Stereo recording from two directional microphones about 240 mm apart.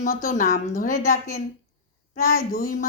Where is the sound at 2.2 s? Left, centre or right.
Left.